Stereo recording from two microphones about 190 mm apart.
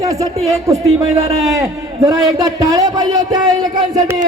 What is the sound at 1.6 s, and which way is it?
A man's voice, 15° right (ahead or behind).